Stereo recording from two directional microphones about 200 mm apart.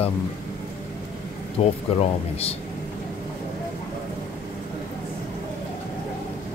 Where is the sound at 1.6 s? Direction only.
30° left (ahead or behind).